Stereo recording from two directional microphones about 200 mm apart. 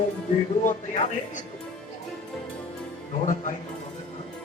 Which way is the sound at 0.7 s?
40° left (ahead or behind).